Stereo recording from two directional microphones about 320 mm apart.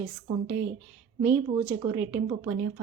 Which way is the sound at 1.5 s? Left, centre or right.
Centre.